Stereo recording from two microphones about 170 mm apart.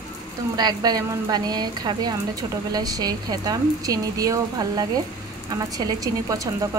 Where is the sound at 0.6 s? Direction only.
25° right (ahead or behind).